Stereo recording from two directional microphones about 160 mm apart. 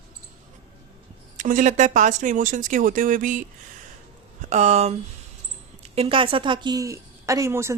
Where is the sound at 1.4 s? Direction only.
55° right (ahead or behind).